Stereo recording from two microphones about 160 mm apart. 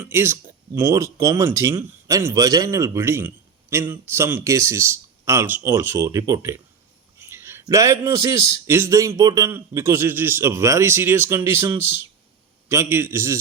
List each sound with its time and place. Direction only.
0.0 s speech: 15° right (ahead or behind)